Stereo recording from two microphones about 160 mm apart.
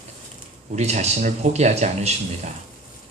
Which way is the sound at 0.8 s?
45° right (ahead or behind).